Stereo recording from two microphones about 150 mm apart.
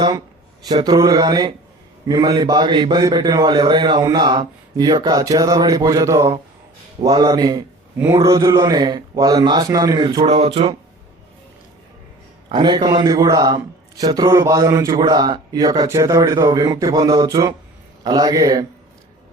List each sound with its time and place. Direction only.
0.7 s a man's voice: 30° right (ahead or behind)
12.5 s a man's voice: 30° right (ahead or behind)